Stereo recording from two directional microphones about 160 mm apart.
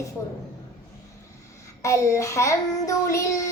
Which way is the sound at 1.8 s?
20° left (ahead or behind).